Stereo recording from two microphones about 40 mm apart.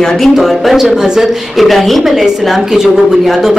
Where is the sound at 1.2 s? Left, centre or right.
Centre.